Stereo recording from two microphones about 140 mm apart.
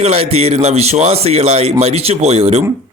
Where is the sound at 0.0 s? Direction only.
45° right (ahead or behind).